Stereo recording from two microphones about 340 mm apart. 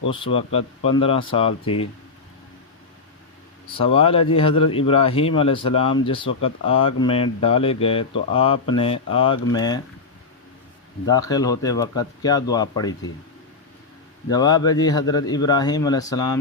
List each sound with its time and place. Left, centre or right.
0.1 s speech: centre
3.8 s speech: centre
11.0 s speech: centre
14.3 s speech: centre